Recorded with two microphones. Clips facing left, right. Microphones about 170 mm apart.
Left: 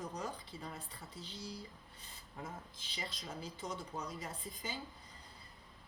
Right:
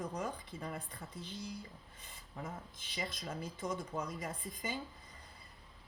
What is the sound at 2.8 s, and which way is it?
A woman's voice, 55° right (ahead or behind).